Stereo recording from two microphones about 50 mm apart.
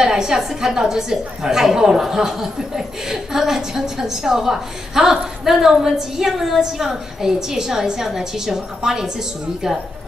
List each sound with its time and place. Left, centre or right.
0.0 s a woman's voice: centre